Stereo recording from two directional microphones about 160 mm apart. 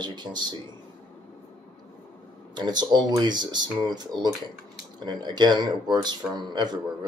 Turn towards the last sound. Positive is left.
turn(degrees=-25)  # may be behind; listen again after turning